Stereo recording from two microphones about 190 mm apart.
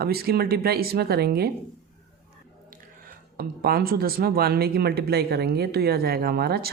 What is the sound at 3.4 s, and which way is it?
Speech, 55° right (ahead or behind).